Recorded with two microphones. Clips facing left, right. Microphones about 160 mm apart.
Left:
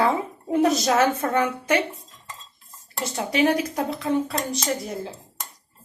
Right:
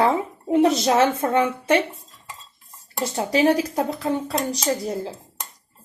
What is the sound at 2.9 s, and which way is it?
Speech, 30° right (ahead or behind).